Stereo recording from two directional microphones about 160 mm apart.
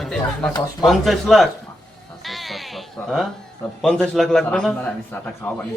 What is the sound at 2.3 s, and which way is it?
Bleat, centre (ahead or behind).